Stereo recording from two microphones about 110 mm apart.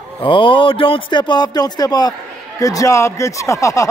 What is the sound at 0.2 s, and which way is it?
Speech, 50° left (ahead or behind).